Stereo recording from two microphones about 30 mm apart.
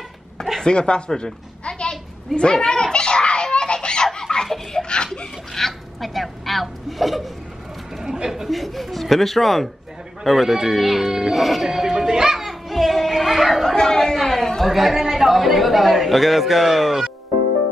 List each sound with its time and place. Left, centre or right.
0.7 s a sound: left
4.8 s laughter: left
5.5 s a sound: centre
8.0 s a sound: right
8.5 s a man's voice: centre
10.2 s a man's voice: centre
11.6 s speech: centre
11.9 s music: right
12.4 s music: centre
13.7 s speech: left
14.1 s speech: centre
14.6 s a man's voice: centre